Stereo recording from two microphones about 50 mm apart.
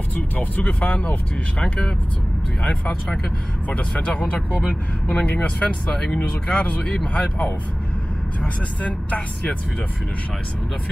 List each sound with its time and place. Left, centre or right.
0.4 s speech: left
1.6 s speech: centre
3.9 s speech: centre